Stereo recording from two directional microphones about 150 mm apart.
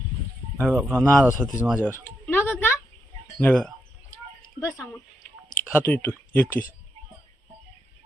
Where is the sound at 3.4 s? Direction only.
5° left (ahead or behind).